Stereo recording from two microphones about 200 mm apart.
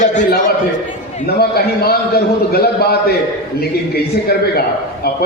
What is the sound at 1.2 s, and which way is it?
A man's voice, 50° left (ahead or behind).